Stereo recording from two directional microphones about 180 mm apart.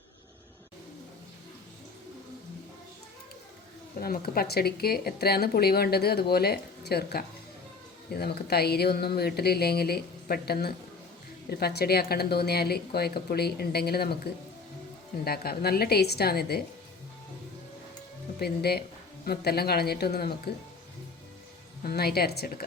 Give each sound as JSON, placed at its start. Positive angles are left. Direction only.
{"t": 4.0, "sound": "speech", "side_deg": 55}
{"t": 15.2, "sound": "speech", "side_deg": 60}
{"t": 18.3, "sound": "speech", "side_deg": 60}
{"t": 21.8, "sound": "speech", "side_deg": 60}